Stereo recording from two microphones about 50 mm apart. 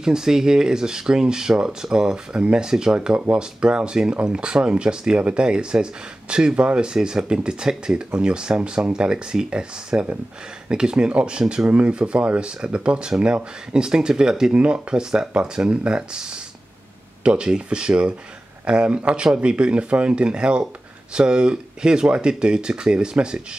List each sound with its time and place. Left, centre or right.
0.0 s speech: centre